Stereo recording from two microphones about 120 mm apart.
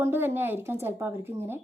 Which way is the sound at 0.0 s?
20° right (ahead or behind).